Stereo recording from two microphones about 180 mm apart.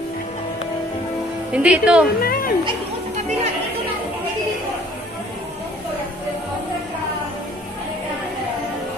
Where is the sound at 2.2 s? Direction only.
55° left (ahead or behind).